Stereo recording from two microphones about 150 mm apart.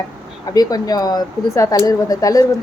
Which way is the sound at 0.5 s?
25° left (ahead or behind).